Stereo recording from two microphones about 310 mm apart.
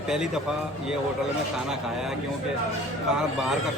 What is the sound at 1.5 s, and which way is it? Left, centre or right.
Speech, centre.